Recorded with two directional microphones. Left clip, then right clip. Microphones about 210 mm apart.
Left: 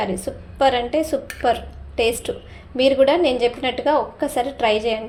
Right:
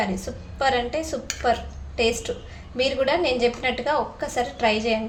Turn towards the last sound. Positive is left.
turn(degrees=30)  # may be behind; listen again after turning